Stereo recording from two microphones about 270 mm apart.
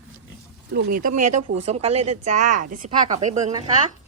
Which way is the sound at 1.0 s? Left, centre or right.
Right.